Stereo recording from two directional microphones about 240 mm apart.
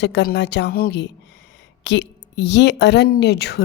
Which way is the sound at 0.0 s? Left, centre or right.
Left.